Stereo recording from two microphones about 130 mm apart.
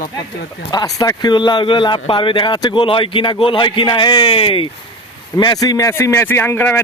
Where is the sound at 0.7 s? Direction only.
30° left (ahead or behind).